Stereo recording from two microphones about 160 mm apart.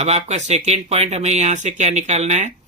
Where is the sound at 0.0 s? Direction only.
45° right (ahead or behind).